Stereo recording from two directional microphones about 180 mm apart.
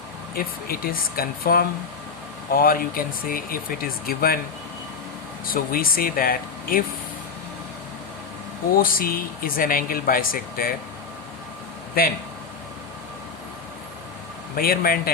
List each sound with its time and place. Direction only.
0.3 s speech: 55° left (ahead or behind)
5.5 s speech: 55° left (ahead or behind)
8.8 s speech: 55° left (ahead or behind)
12.0 s speech: 55° left (ahead or behind)
14.5 s speech: 55° left (ahead or behind)